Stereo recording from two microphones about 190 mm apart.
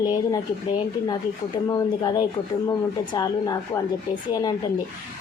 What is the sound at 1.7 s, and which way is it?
Speech, 20° left (ahead or behind).